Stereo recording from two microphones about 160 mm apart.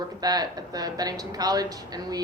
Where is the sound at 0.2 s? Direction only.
25° right (ahead or behind).